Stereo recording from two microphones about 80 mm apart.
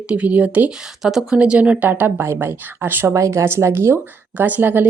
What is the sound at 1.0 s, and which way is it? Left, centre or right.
Speech, centre.